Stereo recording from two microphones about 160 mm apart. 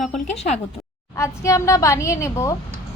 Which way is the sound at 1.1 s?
20° left (ahead or behind).